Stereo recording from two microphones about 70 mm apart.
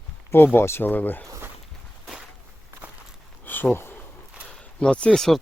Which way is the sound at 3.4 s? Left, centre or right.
Left.